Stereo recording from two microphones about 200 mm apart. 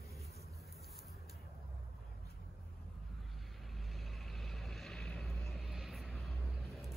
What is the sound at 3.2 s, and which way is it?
Vehicle, centre (ahead or behind).